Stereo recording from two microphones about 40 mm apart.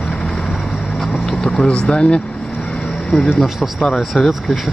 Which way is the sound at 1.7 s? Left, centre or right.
Left.